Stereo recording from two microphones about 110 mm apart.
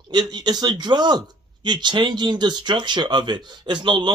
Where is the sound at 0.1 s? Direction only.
40° right (ahead or behind).